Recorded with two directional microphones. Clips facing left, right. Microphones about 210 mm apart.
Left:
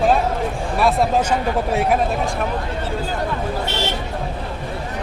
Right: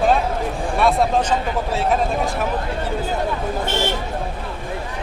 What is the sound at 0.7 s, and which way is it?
Speech, centre (ahead or behind).